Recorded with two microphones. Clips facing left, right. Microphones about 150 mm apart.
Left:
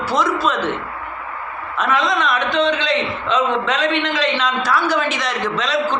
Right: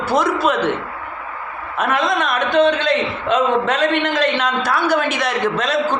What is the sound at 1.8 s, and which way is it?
A man's voice, 55° right (ahead or behind).